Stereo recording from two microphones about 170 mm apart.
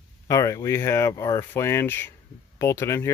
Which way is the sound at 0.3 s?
15° left (ahead or behind).